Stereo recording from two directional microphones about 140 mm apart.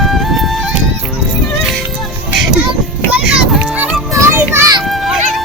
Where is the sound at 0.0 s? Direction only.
Centre (ahead or behind).